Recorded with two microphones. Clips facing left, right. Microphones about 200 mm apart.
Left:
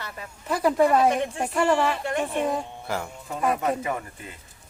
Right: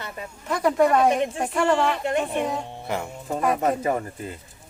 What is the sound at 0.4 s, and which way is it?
Speech, 5° left (ahead or behind).